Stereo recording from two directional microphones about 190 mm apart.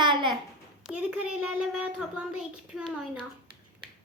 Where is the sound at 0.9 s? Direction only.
5° right (ahead or behind).